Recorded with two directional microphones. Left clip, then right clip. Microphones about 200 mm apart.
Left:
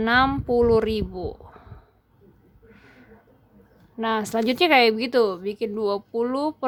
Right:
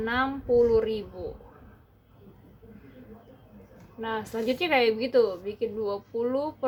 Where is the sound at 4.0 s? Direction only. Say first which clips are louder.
Left 7 dB; 45° left (ahead or behind).